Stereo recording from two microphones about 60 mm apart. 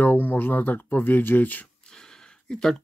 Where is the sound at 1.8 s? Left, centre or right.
Centre.